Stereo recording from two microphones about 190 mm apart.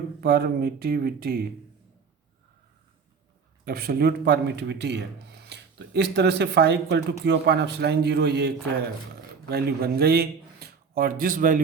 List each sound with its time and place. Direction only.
0.2 s speech: 55° right (ahead or behind)
3.7 s a man's voice: 50° right (ahead or behind)